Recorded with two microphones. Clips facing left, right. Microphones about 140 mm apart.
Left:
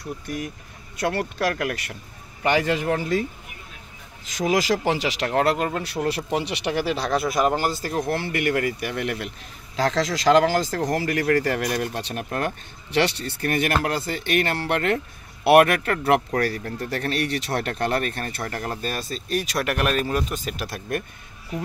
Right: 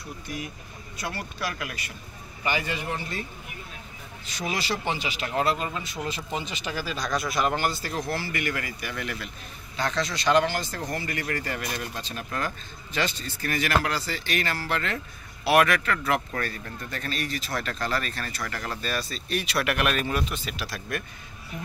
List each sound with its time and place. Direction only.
1.0 s speech: 65° left (ahead or behind)
2.4 s speech: 85° left
4.3 s speech: 90° left; by 9.3 s 70° left (ahead or behind)
9.8 s speech: 90° left; by 21.0 s 50° left (ahead or behind)